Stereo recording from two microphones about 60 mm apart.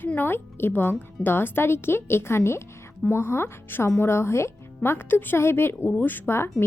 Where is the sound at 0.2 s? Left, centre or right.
Left.